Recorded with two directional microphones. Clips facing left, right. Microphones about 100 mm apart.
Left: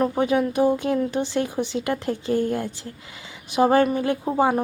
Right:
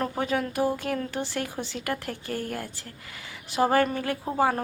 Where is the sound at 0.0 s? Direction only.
20° left (ahead or behind).